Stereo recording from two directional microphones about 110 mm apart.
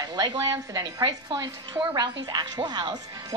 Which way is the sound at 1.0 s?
45° right (ahead or behind).